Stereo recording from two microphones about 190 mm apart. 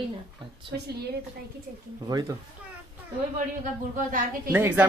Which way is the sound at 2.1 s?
20° right (ahead or behind).